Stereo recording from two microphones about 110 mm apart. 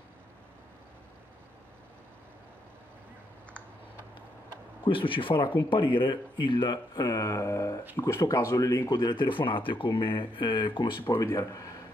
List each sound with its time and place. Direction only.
4.8 s speech: 50° left (ahead or behind); by 9.1 s 35° left (ahead or behind)
9.1 s speech: 50° left (ahead or behind)
11.1 s speech: 25° left (ahead or behind)